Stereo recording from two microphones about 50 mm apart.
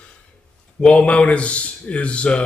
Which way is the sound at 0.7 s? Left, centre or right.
Left.